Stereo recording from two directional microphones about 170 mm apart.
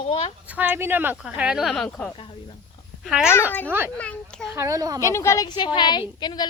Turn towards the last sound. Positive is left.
turn(degrees=25)  # may be behind; listen again after turning